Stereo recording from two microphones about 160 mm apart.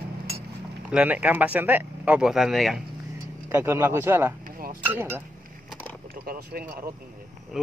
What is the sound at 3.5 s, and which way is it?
Speech, 15° right (ahead or behind).